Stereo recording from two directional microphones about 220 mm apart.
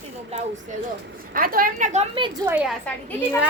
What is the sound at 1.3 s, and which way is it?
Speech, 40° right (ahead or behind).